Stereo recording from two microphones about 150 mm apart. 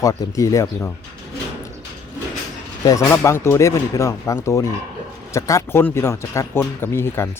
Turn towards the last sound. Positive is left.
turn(degrees=15)  # may be behind; listen again after turning